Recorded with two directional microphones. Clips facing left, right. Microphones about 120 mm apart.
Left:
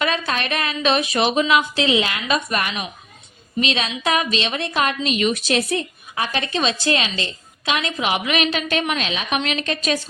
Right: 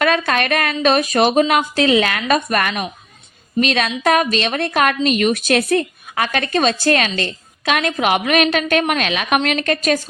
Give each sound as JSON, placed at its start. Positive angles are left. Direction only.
{"t": 0.0, "sound": "a woman's voice", "side_deg": -55}